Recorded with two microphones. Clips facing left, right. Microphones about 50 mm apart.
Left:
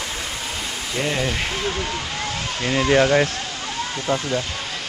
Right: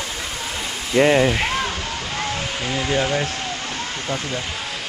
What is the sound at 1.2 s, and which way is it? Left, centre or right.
Speech, centre.